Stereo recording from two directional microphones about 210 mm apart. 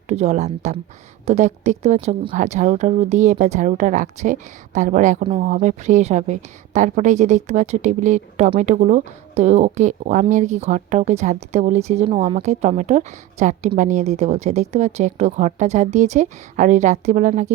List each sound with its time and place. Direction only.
0.1 s a woman's voice: 30° right (ahead or behind)